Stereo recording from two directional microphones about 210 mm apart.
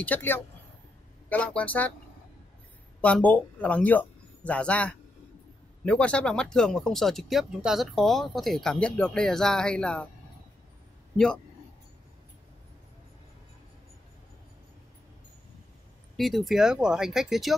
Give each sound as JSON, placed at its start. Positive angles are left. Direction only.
{"t": 0.0, "sound": "speech", "side_deg": 10}
{"t": 3.0, "sound": "speech", "side_deg": 5}
{"t": 16.2, "sound": "speech", "side_deg": 0}